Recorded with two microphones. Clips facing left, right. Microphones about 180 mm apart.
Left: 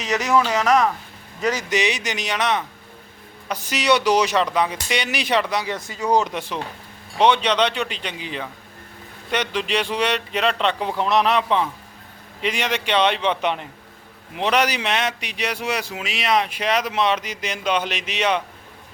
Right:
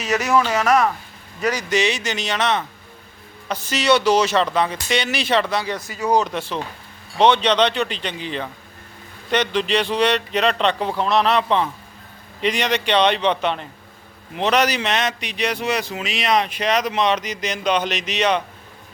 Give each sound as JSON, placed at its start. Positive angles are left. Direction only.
{"t": 0.0, "sound": "speech", "side_deg": 15}
{"t": 5.9, "sound": "speech", "side_deg": -5}
{"t": 6.1, "sound": "speech", "side_deg": 15}